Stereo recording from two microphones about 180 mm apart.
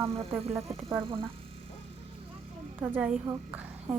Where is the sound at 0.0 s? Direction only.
35° right (ahead or behind).